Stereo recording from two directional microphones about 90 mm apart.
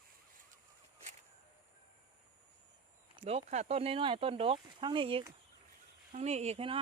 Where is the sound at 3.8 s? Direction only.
90° right.